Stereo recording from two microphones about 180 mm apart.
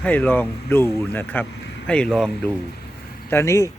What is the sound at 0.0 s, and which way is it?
Speech, 10° left (ahead or behind).